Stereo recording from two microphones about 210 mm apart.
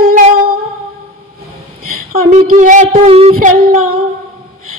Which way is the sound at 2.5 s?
40° right (ahead or behind).